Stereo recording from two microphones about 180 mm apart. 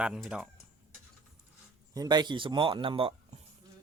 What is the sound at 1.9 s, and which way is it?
Speech, 25° right (ahead or behind).